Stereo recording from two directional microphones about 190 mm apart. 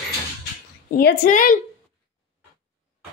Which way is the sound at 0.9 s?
55° left (ahead or behind).